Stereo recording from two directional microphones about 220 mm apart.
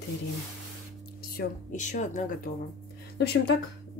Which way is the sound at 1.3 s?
35° left (ahead or behind).